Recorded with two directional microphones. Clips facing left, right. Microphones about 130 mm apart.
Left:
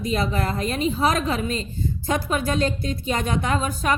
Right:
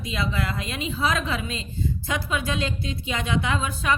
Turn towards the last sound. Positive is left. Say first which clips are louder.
# left 2 dB
turn(degrees=40)  # may be behind; listen again after turning